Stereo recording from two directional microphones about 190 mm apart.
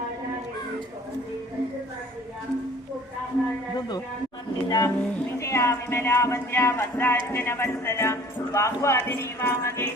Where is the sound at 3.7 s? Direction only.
20° left (ahead or behind).